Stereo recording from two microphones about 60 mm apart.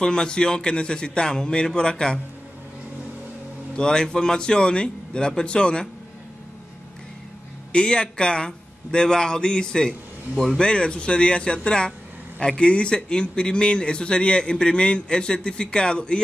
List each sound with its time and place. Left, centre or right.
0.0 s a man's voice: centre
3.7 s a man's voice: centre
7.7 s a man's voice: centre